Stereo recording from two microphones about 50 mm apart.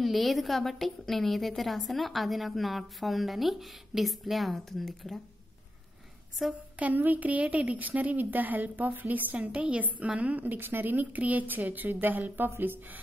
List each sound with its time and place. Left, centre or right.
0.0 s a woman's voice: centre
6.8 s a woman's voice: right
12.4 s music: right